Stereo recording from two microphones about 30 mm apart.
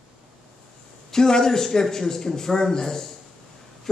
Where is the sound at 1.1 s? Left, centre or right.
Centre.